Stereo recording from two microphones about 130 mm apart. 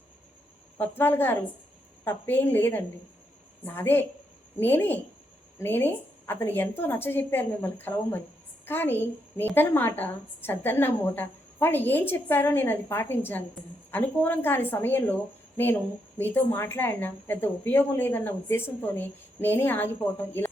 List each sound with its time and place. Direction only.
0.8 s speech: 15° left (ahead or behind)
16.1 s speech: 15° left (ahead or behind)